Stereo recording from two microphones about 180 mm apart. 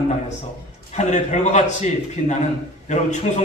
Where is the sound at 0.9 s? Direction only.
40° left (ahead or behind).